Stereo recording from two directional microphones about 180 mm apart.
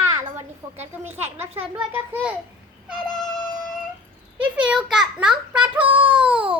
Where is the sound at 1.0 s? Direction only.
10° right (ahead or behind).